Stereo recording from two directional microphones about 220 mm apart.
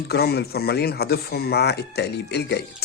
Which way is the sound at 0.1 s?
45° left (ahead or behind).